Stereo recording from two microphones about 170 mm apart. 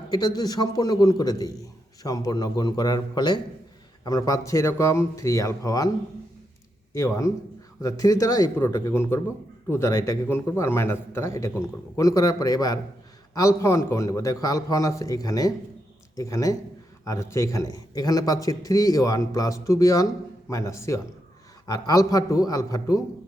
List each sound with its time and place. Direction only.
0.1 s a man's voice: 25° left (ahead or behind)
6.9 s a man's voice: 15° left (ahead or behind)